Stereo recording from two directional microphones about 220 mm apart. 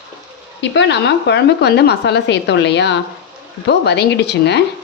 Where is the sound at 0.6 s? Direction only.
55° left (ahead or behind).